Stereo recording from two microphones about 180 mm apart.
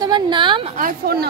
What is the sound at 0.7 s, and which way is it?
Speech, 55° right (ahead or behind).